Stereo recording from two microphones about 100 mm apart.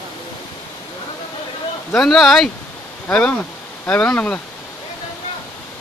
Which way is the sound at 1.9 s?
5° left (ahead or behind).